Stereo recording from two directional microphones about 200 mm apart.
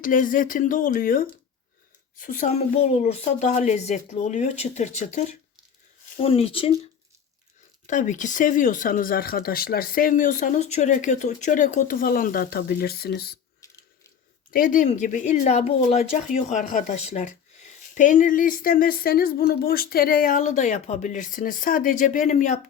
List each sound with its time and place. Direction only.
0.0 s speech: 40° left (ahead or behind)
7.9 s speech: 40° left (ahead or behind)
13.6 s mechanisms: 15° left (ahead or behind)
14.5 s speech: 45° left (ahead or behind)